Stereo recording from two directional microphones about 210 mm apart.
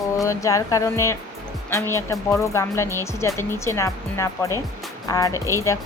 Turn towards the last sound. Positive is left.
turn(degrees=15)  # may be behind; listen again after turning